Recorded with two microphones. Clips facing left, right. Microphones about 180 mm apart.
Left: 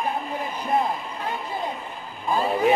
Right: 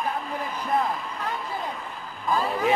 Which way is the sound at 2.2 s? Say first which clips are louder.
Left 3 dB; 25° left (ahead or behind).